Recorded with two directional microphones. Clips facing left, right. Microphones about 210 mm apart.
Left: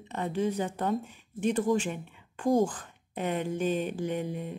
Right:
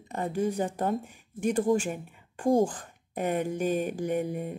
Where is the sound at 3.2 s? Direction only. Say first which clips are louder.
Right 3 dB; 50° right (ahead or behind).